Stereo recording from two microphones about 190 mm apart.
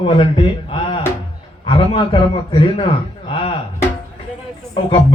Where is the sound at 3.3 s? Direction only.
30° left (ahead or behind).